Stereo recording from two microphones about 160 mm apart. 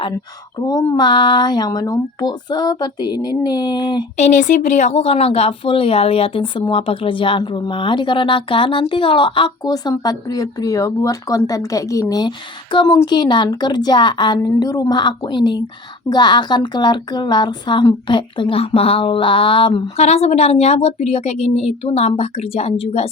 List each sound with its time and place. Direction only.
0.7 s speech: 20° left (ahead or behind)
4.2 s speech: 50° left (ahead or behind)